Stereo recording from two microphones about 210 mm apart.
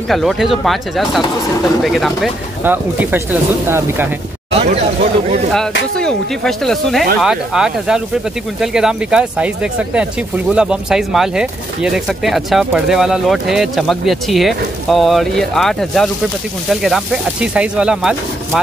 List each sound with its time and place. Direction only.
0.1 s speech: centre (ahead or behind)
4.6 s speech: 35° right (ahead or behind)
5.9 s speech: 5° left (ahead or behind)